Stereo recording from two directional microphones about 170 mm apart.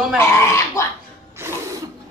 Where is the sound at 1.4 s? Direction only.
20° right (ahead or behind).